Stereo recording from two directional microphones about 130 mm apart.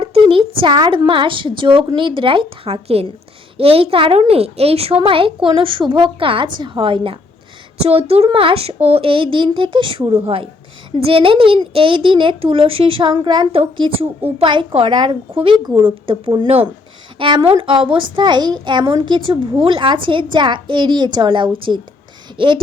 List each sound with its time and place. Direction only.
0.0 s a woman's voice: 45° right (ahead or behind)